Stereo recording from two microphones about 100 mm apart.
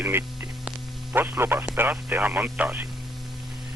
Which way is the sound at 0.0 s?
20° right (ahead or behind).